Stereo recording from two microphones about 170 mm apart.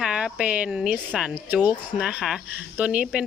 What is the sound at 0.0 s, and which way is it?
Speech, 5° right (ahead or behind).